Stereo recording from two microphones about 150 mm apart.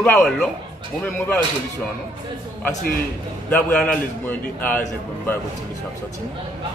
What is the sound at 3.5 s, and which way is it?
A man's voice, 10° left (ahead or behind).